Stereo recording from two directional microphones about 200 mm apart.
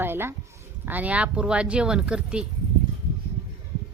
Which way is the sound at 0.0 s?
10° right (ahead or behind).